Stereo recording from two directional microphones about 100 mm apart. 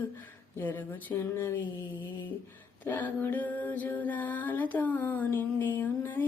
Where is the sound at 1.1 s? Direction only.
30° left (ahead or behind).